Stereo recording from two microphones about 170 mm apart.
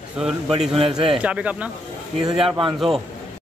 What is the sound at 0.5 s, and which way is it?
Speech, 35° right (ahead or behind).